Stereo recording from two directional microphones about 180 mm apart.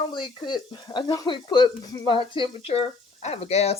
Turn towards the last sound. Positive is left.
turn(degrees=35)  # may be behind; listen again after turning